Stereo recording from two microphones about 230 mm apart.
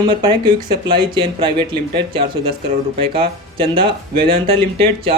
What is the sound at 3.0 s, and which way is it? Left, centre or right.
Speech, right.